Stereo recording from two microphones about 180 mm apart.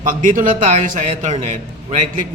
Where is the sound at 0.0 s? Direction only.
45° right (ahead or behind).